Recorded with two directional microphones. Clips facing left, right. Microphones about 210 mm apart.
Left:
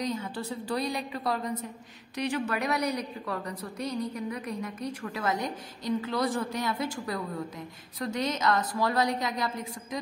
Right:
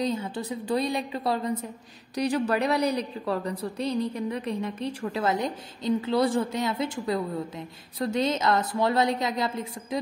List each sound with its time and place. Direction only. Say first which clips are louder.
0.0 s a woman's voice: right 4 dB; 25° right (ahead or behind)